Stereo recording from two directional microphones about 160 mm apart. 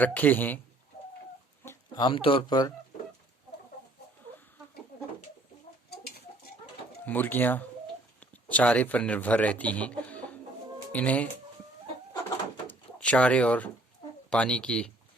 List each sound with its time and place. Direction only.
0.0 s a man's voice: 10° left (ahead or behind)
1.6 s speech: 25° left (ahead or behind)
5.9 s bird: 75° left (ahead or behind)
7.0 s a man's voice: 10° left (ahead or behind)
12.6 s drawer open or close: 5° left (ahead or behind)
14.3 s speech: 5° left (ahead or behind)